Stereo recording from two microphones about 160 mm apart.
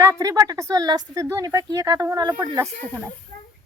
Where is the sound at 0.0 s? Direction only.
20° right (ahead or behind).